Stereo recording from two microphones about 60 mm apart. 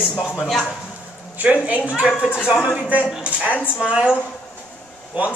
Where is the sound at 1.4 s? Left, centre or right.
Right.